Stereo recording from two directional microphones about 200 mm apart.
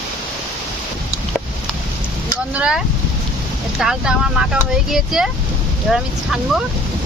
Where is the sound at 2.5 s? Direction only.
5° right (ahead or behind).